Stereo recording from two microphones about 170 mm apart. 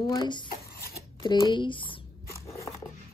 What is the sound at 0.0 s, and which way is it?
Speech, 25° left (ahead or behind).